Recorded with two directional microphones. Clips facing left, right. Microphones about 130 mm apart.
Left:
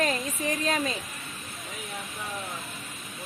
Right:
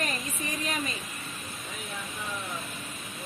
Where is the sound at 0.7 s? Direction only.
90° left.